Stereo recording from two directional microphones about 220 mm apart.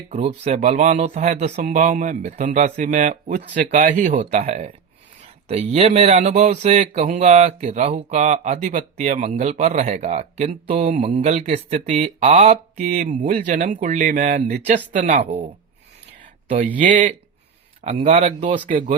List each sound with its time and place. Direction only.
0.1 s speech: 35° right (ahead or behind)
16.7 s speech: 35° right (ahead or behind)
18.7 s speech: 35° right (ahead or behind)